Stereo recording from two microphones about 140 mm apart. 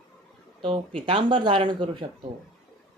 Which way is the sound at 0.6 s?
35° right (ahead or behind).